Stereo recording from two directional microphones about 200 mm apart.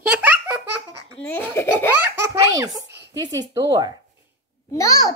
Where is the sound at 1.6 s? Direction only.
10° left (ahead or behind).